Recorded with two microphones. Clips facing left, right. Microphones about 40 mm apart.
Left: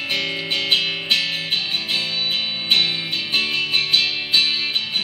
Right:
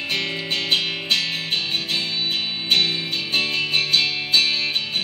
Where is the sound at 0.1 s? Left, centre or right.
Centre.